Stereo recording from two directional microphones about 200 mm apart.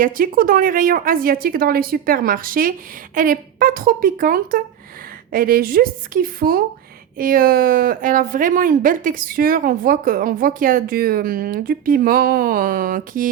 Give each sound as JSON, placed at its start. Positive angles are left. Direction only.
{"t": 0.0, "sound": "a woman's voice", "side_deg": -45}